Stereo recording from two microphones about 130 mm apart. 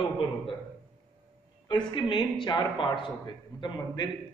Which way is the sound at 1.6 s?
35° left (ahead or behind).